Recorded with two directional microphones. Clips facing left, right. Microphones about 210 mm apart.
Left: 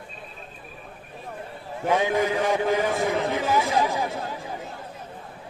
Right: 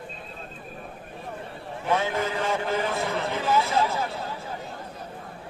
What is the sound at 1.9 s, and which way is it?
A man's voice, 15° left (ahead or behind).